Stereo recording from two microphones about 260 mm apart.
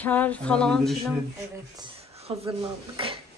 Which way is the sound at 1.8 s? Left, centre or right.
Right.